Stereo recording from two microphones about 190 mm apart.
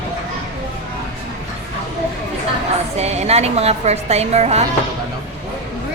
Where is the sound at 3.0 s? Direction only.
35° right (ahead or behind).